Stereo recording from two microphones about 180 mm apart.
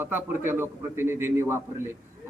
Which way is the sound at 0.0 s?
10° right (ahead or behind).